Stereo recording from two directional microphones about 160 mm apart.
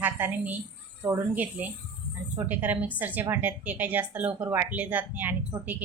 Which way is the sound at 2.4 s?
10° right (ahead or behind).